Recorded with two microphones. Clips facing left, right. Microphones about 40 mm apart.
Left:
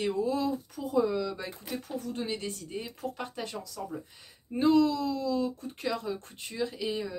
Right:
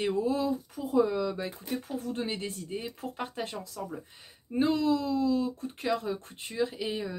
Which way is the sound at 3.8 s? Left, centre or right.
Centre.